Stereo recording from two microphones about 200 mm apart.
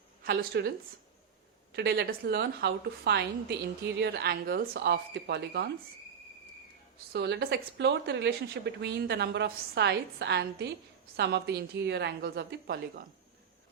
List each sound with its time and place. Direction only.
0.3 s a woman's voice: 50° right (ahead or behind)
1.7 s speech: 55° right (ahead or behind)
7.1 s speech: 55° right (ahead or behind)